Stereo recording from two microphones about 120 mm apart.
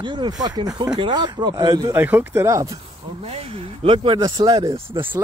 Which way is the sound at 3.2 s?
50° right (ahead or behind).